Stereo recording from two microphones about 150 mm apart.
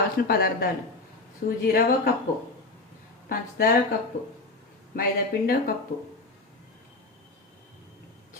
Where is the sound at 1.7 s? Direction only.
80° left.